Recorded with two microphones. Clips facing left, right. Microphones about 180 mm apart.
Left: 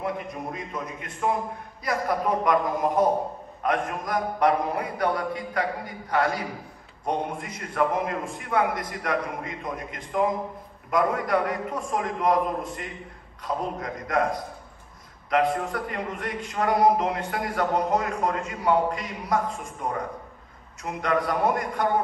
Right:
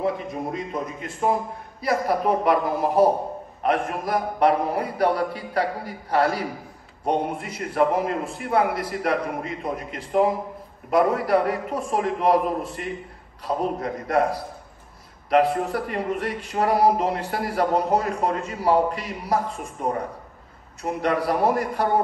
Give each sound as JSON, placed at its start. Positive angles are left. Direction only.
{"t": 0.0, "sound": "a man's voice", "side_deg": -30}